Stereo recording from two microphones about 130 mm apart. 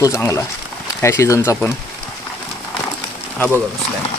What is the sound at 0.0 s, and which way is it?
Speech, 25° left (ahead or behind).